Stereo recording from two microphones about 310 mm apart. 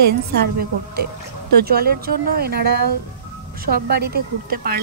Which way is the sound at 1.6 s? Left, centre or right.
Right.